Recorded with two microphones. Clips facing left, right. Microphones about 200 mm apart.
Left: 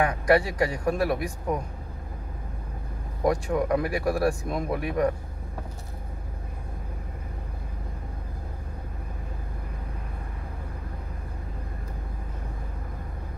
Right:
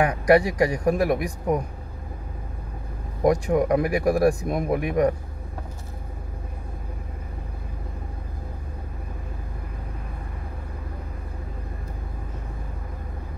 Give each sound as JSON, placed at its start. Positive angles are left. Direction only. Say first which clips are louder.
{"t": 0.3, "sound": "speech", "louder": "right 5 dB", "side_deg": -15}
{"t": 3.3, "sound": "speech", "louder": "right 4 dB", "side_deg": -15}